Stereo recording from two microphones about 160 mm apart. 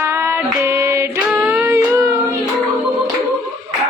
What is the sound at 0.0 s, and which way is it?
Female singing, 15° right (ahead or behind).